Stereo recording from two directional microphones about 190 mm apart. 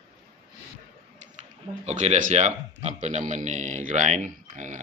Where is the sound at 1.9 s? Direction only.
35° right (ahead or behind).